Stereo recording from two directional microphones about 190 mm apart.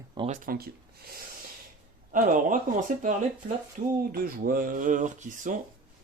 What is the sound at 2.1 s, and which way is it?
Speech, 45° right (ahead or behind).